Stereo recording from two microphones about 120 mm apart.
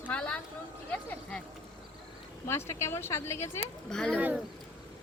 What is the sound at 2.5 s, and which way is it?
A woman's voice, 20° left (ahead or behind).